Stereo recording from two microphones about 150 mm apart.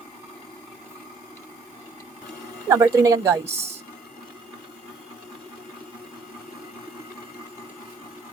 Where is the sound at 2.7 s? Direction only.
20° right (ahead or behind).